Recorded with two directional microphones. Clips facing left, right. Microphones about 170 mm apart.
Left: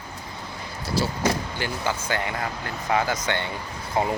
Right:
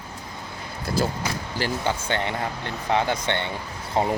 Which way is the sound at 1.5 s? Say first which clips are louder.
Right 2 dB; 30° right (ahead or behind).